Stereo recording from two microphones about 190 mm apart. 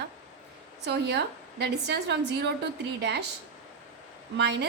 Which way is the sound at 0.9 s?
60° right (ahead or behind).